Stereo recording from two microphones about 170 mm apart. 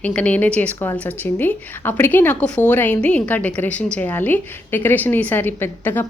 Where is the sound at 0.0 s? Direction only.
5° left (ahead or behind).